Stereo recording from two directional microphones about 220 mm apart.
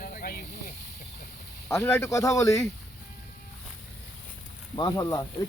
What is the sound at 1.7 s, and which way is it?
Speech, 10° left (ahead or behind).